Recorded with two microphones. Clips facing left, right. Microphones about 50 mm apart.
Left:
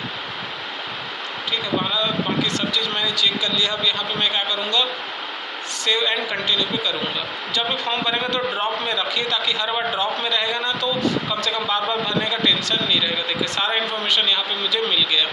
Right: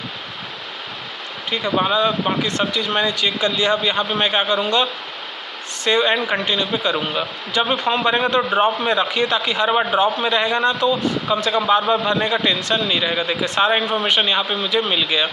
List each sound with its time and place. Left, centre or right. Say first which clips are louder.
1.5 s speech: right 5 dB; right
5.9 s a man's voice: right 5 dB; right